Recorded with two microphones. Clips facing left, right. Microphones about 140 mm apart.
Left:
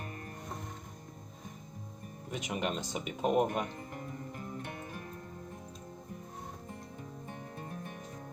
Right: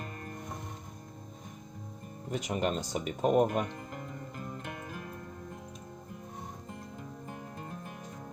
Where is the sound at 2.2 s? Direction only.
35° right (ahead or behind).